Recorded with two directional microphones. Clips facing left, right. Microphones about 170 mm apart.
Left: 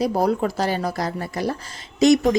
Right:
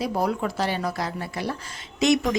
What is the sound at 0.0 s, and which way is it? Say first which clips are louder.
A woman's voice: left 5 dB; 35° left (ahead or behind).